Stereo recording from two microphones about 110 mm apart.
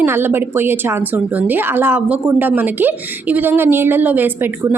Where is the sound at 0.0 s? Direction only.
20° right (ahead or behind).